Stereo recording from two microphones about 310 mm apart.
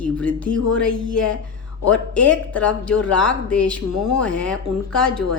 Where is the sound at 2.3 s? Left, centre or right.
Centre.